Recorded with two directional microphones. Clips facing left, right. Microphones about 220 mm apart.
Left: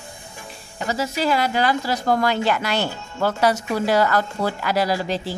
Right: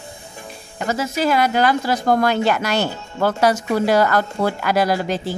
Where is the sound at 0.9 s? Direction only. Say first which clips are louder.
Right 2 dB; 50° right (ahead or behind).